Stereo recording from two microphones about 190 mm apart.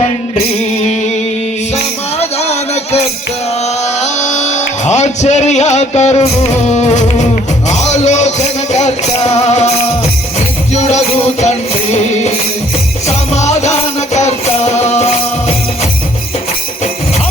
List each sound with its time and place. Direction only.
2.4 s music: 35° left (ahead or behind)
4.0 s music: 40° left (ahead or behind)
10.8 s music: 35° left (ahead or behind)